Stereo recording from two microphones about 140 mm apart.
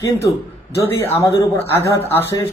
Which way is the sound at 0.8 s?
20° left (ahead or behind).